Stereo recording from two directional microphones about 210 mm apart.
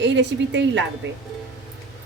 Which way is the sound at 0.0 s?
60° right (ahead or behind).